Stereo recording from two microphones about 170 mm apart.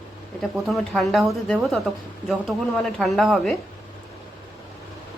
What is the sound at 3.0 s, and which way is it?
Speech, centre (ahead or behind).